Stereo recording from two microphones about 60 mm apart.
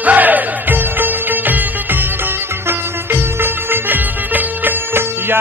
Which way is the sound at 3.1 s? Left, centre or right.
Right.